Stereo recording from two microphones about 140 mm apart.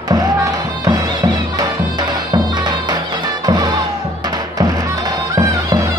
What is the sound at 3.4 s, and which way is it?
Music, 30° right (ahead or behind).